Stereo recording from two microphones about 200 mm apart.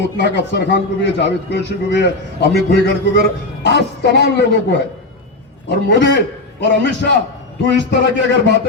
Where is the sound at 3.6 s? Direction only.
60° left (ahead or behind).